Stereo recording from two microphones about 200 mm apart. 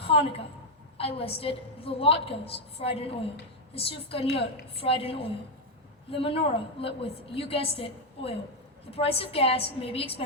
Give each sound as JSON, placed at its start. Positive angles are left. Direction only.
{"t": 0.0, "sound": "a woman's voice", "side_deg": 30}